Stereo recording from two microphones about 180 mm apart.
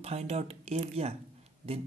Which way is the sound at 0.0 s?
35° right (ahead or behind).